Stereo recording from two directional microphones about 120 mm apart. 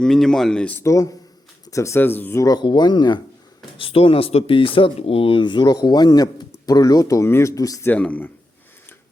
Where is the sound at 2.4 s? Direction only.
35° left (ahead or behind).